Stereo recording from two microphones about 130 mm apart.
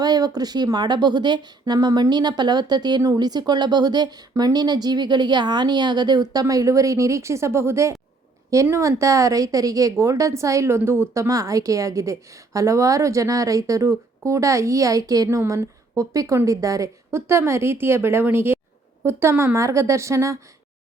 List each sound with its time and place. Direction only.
0.0 s a woman's voice: 30° right (ahead or behind)